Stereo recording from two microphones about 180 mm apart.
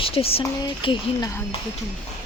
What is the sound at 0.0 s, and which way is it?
Speech, 30° left (ahead or behind).